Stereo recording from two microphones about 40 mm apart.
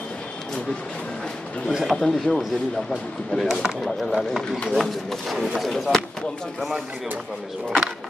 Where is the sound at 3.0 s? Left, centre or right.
Left.